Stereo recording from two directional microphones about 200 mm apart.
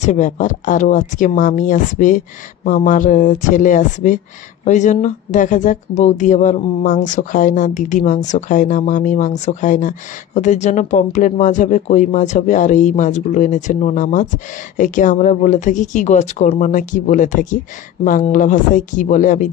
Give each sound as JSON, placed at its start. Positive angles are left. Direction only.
{"t": 0.0, "sound": "speech", "side_deg": 35}